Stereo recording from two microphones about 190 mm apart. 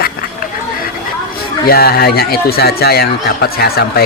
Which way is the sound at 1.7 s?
55° left (ahead or behind).